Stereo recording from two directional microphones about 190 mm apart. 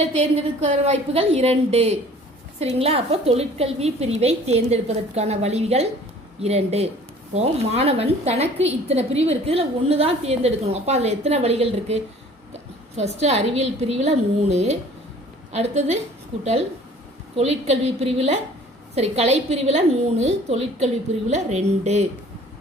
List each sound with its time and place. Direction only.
0.9 s a woman's voice: 35° right (ahead or behind)